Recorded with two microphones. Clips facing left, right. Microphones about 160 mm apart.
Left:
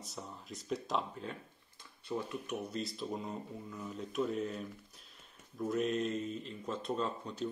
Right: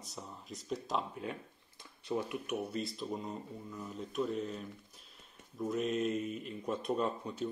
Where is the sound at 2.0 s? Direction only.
15° right (ahead or behind).